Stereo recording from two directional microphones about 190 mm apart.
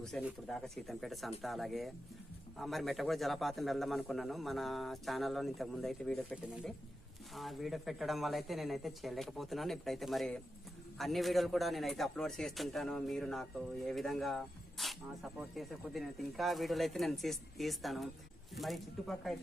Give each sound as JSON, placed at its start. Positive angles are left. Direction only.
{"t": 0.0, "sound": "a man's voice", "side_deg": 0}